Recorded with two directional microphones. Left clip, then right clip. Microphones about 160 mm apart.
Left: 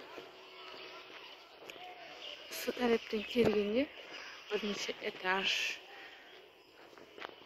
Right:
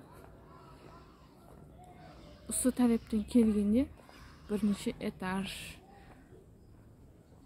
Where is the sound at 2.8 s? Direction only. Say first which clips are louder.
Even; 5° right (ahead or behind).